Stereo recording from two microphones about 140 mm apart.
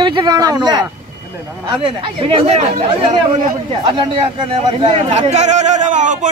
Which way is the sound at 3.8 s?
35° right (ahead or behind).